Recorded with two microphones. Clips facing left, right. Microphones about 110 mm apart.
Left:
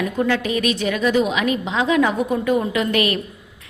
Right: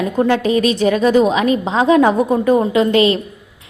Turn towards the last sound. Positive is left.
turn(degrees=-25)  # may be behind; listen again after turning